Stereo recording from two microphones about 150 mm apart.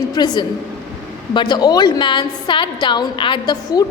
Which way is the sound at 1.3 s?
30° left (ahead or behind).